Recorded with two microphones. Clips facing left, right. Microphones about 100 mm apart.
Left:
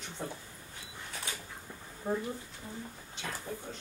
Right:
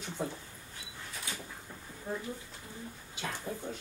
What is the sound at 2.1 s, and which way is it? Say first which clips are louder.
Speech: left 5 dB; 25° left (ahead or behind).